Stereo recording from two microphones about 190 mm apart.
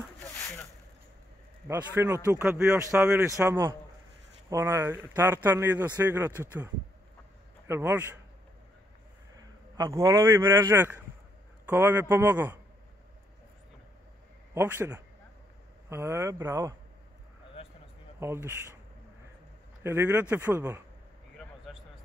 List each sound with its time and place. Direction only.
0.2 s a sound: 10° left (ahead or behind)
1.8 s speech: 15° right (ahead or behind)
9.4 s speech: 20° right (ahead or behind)
14.5 s speech: 10° right (ahead or behind)
18.2 s speech: 15° right (ahead or behind)
19.8 s speech: 15° right (ahead or behind)